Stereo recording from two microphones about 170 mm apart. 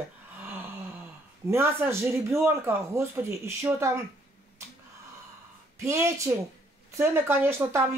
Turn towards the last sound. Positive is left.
turn(degrees=-15)  # may be behind; listen again after turning